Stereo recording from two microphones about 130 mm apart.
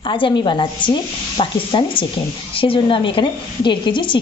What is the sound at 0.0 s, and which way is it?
A woman's voice, 40° left (ahead or behind).